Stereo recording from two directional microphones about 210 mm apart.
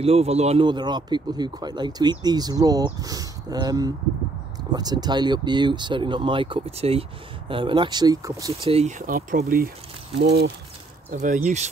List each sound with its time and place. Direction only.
0.0 s speech: 30° right (ahead or behind)
8.6 s speech: 30° right (ahead or behind)
11.1 s speech: 35° right (ahead or behind)